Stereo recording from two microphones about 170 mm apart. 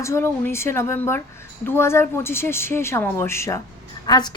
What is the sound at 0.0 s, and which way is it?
A woman's voice, 15° left (ahead or behind).